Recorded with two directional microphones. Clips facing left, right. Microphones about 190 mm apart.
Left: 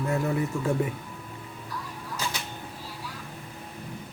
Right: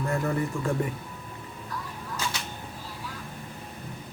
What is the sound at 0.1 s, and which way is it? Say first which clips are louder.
Speech: left 1 dB; 5° left (ahead or behind).